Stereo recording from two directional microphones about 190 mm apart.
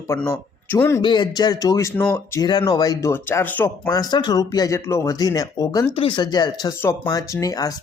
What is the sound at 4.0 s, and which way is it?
A man's voice, 20° left (ahead or behind).